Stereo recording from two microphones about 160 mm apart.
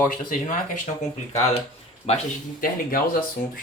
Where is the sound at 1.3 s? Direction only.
40° left (ahead or behind).